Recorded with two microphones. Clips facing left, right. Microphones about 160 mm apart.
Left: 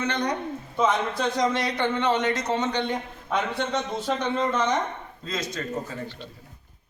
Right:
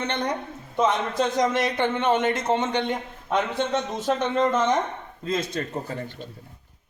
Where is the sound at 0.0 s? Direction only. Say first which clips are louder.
Left 1 dB; 25° right (ahead or behind).